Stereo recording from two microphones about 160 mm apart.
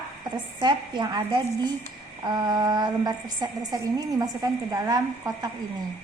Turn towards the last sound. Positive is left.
turn(degrees=-20)  # may be behind; listen again after turning